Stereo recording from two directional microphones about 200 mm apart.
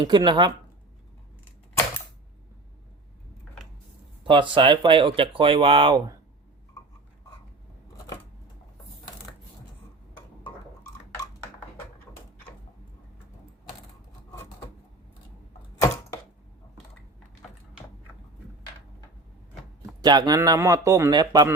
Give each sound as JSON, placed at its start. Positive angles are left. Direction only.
{"t": 0.0, "sound": "speech", "side_deg": -20}
{"t": 4.2, "sound": "speech", "side_deg": -25}
{"t": 15.8, "sound": "a sound", "side_deg": 15}
{"t": 19.8, "sound": "speech", "side_deg": -20}